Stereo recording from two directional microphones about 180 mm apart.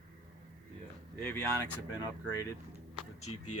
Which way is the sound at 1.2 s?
10° left (ahead or behind).